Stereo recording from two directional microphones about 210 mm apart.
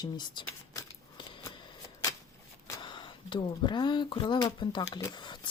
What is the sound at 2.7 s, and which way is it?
Speech, 20° left (ahead or behind).